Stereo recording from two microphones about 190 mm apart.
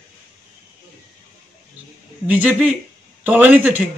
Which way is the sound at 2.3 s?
10° right (ahead or behind).